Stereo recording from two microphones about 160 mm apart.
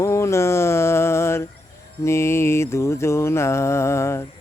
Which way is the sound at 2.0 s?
15° left (ahead or behind).